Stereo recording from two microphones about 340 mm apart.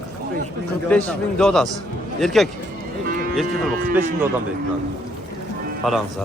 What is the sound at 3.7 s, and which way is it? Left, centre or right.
Speech, right.